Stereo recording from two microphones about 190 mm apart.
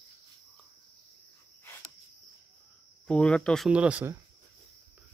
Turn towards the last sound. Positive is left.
turn(degrees=-10)  # may be behind; listen again after turning